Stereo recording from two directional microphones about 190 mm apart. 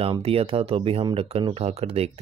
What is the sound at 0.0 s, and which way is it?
Speech, 30° right (ahead or behind).